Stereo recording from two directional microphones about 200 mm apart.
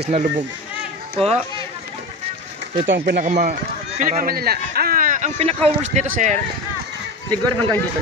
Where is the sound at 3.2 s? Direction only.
35° right (ahead or behind).